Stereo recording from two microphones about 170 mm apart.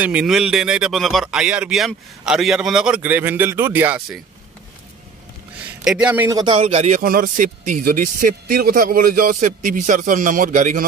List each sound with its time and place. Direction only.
0.0 s speech: 5° right (ahead or behind)
5.9 s a man's voice: 5° right (ahead or behind)
6.3 s speech: 30° right (ahead or behind)
7.0 s speech: 55° right (ahead or behind)